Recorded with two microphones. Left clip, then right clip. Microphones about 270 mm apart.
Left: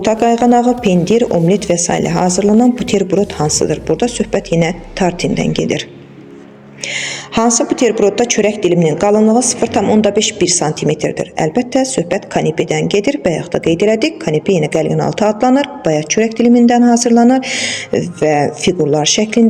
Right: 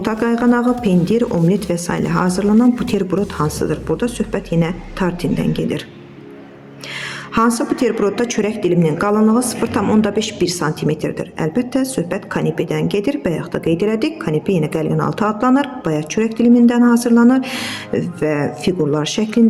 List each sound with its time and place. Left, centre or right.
0.2 s a woman's voice: centre
5.5 s speech: centre
6.9 s a sound: centre
7.8 s a woman's voice: centre